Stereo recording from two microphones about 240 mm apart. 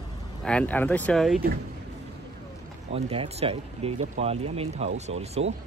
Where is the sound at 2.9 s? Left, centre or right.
Right.